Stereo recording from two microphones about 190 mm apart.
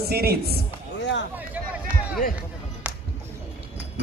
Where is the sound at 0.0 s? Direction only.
55° right (ahead or behind).